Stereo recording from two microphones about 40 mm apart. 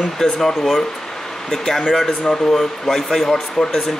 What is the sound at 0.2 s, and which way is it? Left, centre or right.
Speech, centre.